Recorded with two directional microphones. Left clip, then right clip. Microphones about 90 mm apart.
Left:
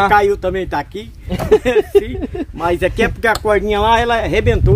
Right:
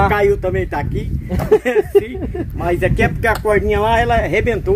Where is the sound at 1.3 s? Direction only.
30° left (ahead or behind).